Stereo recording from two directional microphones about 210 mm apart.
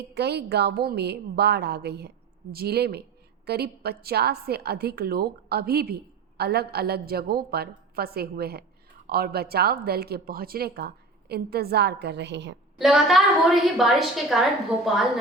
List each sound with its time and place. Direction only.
0.0 s a woman's voice: 50° right (ahead or behind)
12.8 s a woman's voice: centre (ahead or behind)